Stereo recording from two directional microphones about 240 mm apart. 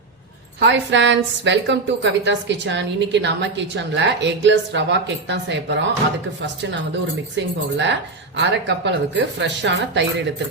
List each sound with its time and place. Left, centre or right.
0.6 s a woman's voice: right